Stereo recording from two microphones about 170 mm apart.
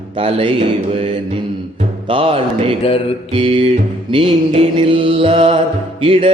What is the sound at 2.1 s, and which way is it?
Mantra, 35° right (ahead or behind).